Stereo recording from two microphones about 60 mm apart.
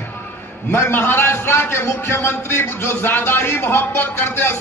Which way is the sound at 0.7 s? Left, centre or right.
Left.